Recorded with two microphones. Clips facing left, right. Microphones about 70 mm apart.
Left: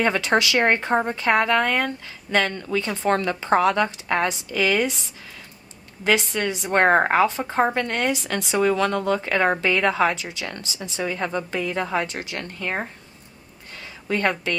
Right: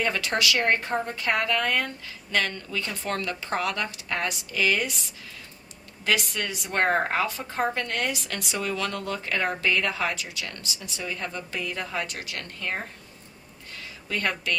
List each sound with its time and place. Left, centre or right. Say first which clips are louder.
0.0 s a woman's voice: left 6 dB; left
6.1 s a woman's voice: left 5 dB; left
14.1 s a woman's voice: left 6 dB; left